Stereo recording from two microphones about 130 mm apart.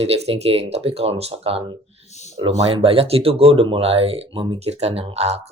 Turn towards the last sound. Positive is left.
turn(degrees=-55)  # may be behind; listen again after turning